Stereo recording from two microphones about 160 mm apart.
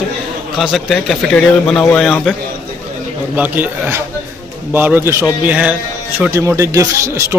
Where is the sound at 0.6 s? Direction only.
Centre (ahead or behind).